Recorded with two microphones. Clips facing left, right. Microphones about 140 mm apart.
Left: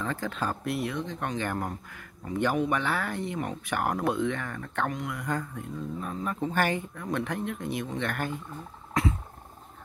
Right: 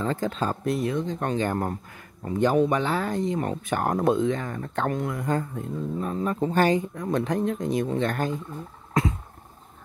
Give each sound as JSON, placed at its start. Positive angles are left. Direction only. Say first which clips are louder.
{"t": 0.0, "sound": "speech", "louder": "right 5 dB", "side_deg": -25}